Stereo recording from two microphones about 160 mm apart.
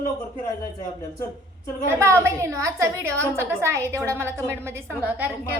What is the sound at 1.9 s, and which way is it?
A woman's voice, 15° right (ahead or behind).